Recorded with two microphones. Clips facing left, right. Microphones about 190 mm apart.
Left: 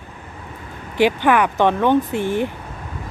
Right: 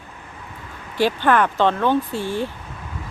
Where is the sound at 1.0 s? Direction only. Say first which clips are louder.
Left 2 dB; 15° left (ahead or behind).